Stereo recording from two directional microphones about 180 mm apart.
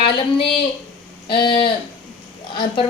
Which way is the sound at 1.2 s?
25° left (ahead or behind).